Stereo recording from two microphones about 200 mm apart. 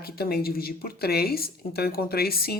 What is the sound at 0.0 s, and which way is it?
Speech, 50° left (ahead or behind).